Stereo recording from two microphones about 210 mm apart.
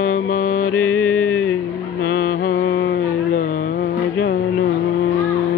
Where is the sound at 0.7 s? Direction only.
10° left (ahead or behind).